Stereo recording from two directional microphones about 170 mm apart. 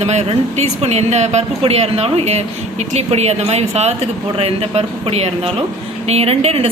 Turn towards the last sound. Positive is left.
turn(degrees=-35)  # may be behind; listen again after turning